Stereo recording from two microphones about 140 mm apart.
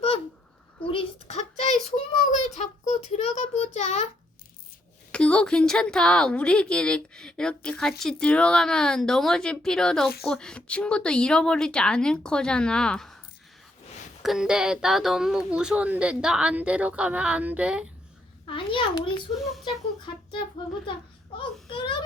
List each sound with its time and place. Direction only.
0.9 s a sound: 45° left (ahead or behind)
5.1 s a woman's voice: 5° left (ahead or behind)
14.2 s speech: 5° right (ahead or behind)
18.4 s a child's voice: 35° left (ahead or behind)
19.3 s a woman's voice: centre (ahead or behind)
21.3 s a child's voice: 35° left (ahead or behind)